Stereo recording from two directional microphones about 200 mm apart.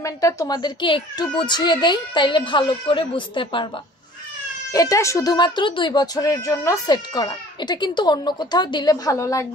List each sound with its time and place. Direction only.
0.0 s speech: 15° left (ahead or behind)
4.7 s speech: 15° left (ahead or behind)